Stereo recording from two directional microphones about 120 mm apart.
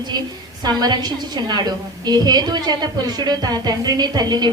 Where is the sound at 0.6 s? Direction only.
35° right (ahead or behind).